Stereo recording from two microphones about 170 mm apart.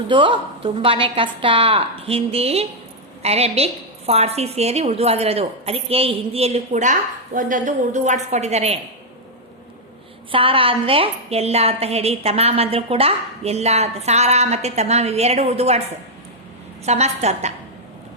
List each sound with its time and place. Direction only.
0.1 s a woman's voice: 30° right (ahead or behind)
10.3 s a woman's voice: 30° right (ahead or behind)
16.8 s a woman's voice: 40° right (ahead or behind)